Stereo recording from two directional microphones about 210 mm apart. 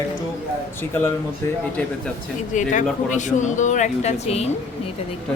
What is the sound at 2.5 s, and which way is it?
Speech, 35° left (ahead or behind).